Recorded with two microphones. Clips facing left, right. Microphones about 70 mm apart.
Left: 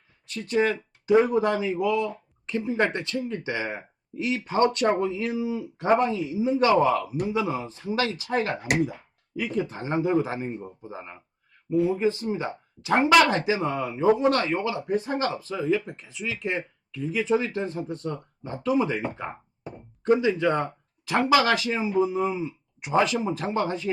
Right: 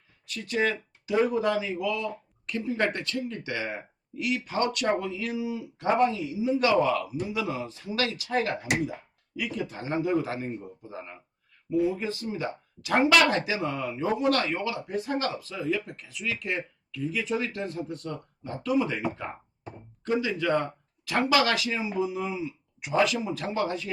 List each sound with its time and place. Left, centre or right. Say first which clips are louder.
0.3 s speech: left 3 dB; left